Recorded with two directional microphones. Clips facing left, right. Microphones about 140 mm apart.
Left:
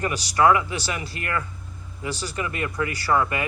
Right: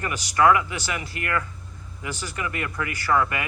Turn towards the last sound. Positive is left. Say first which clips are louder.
# left 1 dB
turn(degrees=25)  # may be behind; listen again after turning